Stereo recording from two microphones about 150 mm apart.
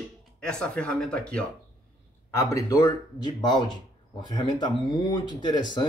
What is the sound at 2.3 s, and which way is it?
Speech, 20° left (ahead or behind).